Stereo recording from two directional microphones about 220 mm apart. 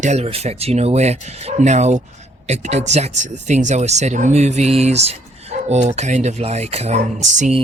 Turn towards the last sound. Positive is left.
turn(degrees=-35)  # may be behind; listen again after turning